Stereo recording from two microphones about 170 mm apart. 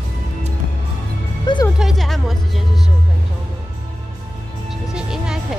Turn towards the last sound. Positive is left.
turn(degrees=-5)  # may be behind; listen again after turning